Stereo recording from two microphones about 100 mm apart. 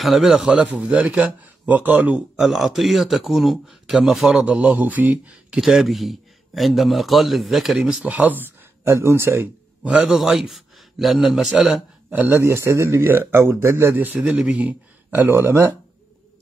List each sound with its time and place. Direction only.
0.0 s a man's voice: centre (ahead or behind); by 2.2 s 15° right (ahead or behind)
2.3 s speech: centre (ahead or behind)
5.6 s a man's voice: centre (ahead or behind); by 9.5 s 25° right (ahead or behind)
9.8 s speech: 5° right (ahead or behind)
12.1 s a man's voice: 20° right (ahead or behind)